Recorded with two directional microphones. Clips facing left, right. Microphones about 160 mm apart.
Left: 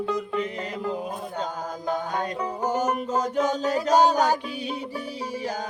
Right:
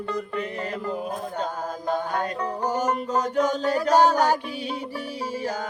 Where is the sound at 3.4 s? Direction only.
15° left (ahead or behind).